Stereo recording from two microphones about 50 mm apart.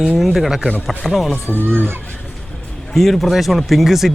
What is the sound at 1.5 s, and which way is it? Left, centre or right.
Speech, right.